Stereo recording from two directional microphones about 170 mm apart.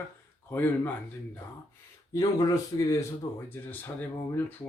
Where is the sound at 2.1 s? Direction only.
20° left (ahead or behind).